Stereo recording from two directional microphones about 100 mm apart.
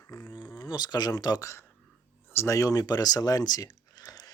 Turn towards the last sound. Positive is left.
turn(degrees=40)  # may be behind; listen again after turning